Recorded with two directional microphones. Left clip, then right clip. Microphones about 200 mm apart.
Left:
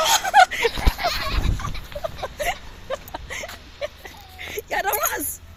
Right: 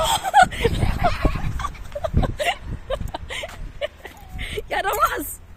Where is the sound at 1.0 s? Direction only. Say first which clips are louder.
Right 1 dB; 40° right (ahead or behind).